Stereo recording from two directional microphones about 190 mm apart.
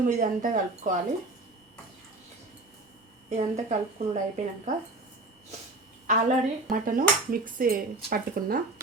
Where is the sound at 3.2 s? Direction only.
40° right (ahead or behind).